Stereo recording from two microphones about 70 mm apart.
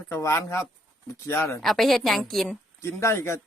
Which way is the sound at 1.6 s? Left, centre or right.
Centre.